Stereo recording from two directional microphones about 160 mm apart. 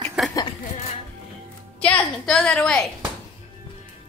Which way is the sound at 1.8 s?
5° left (ahead or behind).